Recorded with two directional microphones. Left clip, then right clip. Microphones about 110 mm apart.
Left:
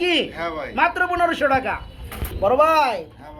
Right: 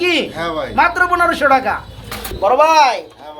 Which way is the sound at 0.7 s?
65° left (ahead or behind).